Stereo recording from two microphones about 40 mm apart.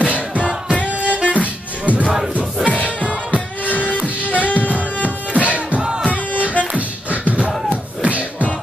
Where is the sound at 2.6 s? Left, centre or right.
Centre.